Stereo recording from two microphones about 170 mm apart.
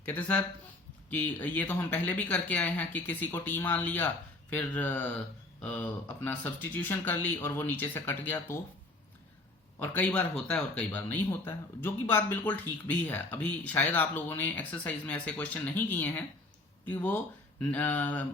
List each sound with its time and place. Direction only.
0.0 s speech: 10° left (ahead or behind)
9.8 s speech: 10° left (ahead or behind)